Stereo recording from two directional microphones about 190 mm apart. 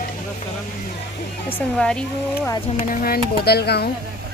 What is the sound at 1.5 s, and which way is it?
Speech, 5° left (ahead or behind).